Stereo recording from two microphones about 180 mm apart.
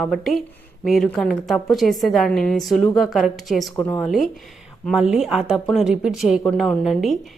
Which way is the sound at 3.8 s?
15° left (ahead or behind).